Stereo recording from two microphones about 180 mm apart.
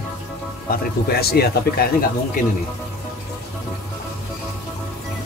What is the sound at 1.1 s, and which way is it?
Speech, 60° left (ahead or behind).